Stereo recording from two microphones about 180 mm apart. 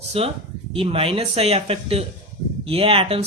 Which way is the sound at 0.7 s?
30° right (ahead or behind).